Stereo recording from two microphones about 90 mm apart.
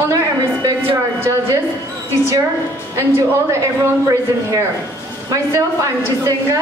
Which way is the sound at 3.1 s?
30° right (ahead or behind).